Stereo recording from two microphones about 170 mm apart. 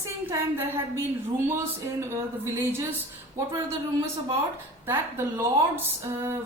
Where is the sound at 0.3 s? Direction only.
15° right (ahead or behind).